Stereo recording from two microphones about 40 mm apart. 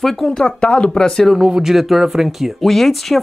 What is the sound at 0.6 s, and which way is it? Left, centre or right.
Speech, left.